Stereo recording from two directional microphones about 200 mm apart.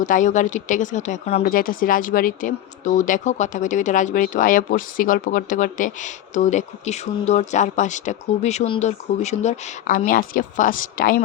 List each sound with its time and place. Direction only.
0.0 s speech: 40° left (ahead or behind)